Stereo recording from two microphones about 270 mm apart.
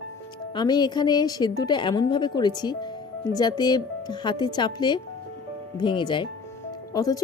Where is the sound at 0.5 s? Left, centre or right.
Centre.